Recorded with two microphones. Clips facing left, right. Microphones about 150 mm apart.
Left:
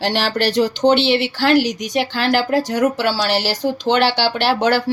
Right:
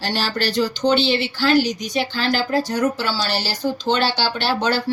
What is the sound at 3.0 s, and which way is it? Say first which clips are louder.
Speech: left 5 dB; 75° left (ahead or behind).